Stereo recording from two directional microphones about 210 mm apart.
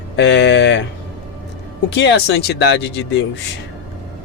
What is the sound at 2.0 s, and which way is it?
Speech, 55° left (ahead or behind).